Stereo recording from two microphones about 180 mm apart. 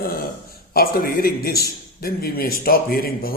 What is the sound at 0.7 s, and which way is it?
A man's voice, 55° left (ahead or behind).